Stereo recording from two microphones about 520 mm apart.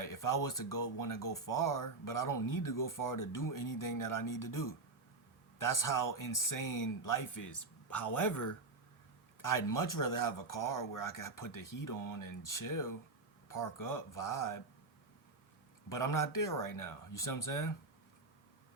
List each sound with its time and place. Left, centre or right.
0.0 s speech: left
15.9 s speech: left